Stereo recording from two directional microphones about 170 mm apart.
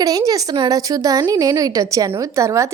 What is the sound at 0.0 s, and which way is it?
A woman's voice, 20° right (ahead or behind).